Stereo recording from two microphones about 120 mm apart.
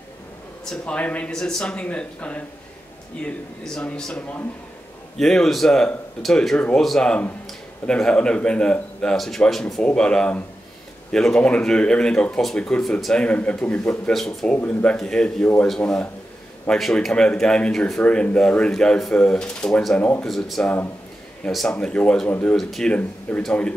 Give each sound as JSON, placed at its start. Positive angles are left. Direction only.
{"t": 0.7, "sound": "speech", "side_deg": 10}
{"t": 3.6, "sound": "speech", "side_deg": 5}